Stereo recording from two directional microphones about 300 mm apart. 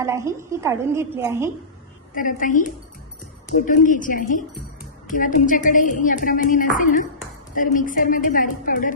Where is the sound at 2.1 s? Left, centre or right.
Left.